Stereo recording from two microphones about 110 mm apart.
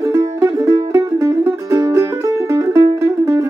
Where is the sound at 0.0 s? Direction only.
25° right (ahead or behind).